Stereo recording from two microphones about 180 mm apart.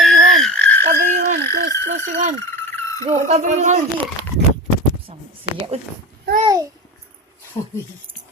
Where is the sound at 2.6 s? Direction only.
10° left (ahead or behind).